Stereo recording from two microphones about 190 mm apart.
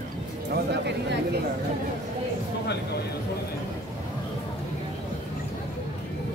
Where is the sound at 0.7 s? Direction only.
65° right (ahead or behind).